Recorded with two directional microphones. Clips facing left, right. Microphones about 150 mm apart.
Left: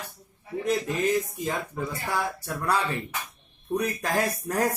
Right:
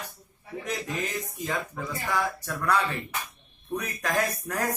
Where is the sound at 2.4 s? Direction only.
30° left (ahead or behind).